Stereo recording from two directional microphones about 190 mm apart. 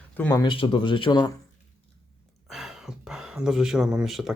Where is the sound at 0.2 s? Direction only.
10° left (ahead or behind).